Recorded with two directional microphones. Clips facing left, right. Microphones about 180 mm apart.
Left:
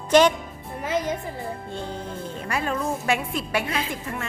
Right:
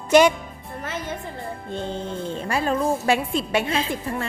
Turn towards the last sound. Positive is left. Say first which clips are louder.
# right 4 dB
turn(degrees=-25)  # may be behind; listen again after turning